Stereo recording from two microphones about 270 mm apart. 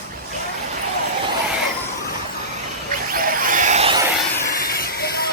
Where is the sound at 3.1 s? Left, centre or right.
Right.